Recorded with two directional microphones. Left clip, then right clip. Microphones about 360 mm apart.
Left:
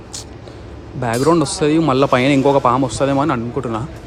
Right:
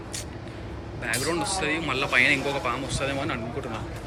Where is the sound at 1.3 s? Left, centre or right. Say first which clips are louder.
Left 13 dB; centre.